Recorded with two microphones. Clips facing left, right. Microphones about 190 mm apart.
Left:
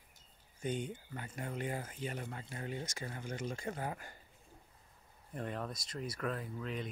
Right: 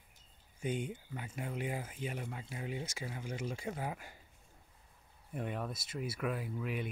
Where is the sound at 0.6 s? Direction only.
5° right (ahead or behind).